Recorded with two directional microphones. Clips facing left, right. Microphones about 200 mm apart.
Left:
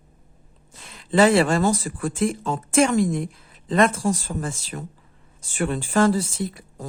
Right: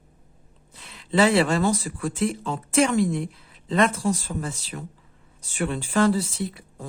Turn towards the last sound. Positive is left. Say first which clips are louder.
# left 2 dB
turn(degrees=45)  # may be behind; listen again after turning